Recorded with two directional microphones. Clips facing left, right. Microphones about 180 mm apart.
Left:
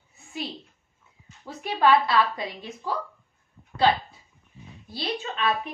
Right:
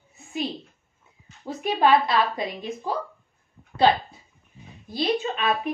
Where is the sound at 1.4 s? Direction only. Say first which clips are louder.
Right 2 dB; 20° right (ahead or behind).